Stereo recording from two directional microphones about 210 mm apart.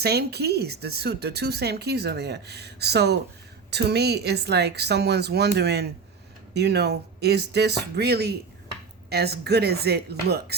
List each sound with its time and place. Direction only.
0.0 s speech: 50° right (ahead or behind)